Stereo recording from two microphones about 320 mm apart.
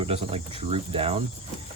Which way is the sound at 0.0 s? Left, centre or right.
Centre.